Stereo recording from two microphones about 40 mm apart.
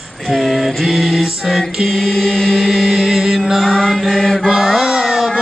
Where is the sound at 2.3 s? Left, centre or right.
Centre.